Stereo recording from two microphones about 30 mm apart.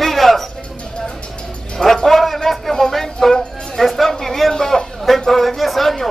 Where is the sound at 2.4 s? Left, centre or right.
Centre.